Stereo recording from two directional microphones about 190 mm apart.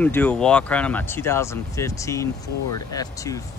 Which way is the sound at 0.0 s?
10° left (ahead or behind).